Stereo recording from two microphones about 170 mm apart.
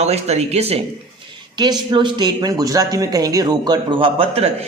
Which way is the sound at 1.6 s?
25° right (ahead or behind).